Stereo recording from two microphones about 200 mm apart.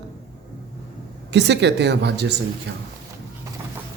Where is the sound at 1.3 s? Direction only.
60° right (ahead or behind).